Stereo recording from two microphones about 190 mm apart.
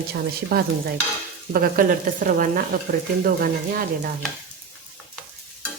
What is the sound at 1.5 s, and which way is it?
Speech, 45° right (ahead or behind).